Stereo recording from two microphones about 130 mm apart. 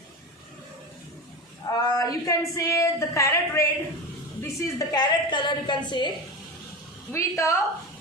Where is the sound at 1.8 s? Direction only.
30° left (ahead or behind).